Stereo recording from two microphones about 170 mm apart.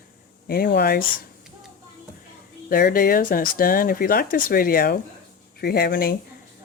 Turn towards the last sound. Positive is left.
turn(degrees=60)  # may be behind; listen again after turning